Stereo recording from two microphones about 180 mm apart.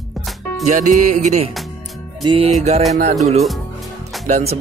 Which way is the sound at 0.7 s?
45° right (ahead or behind).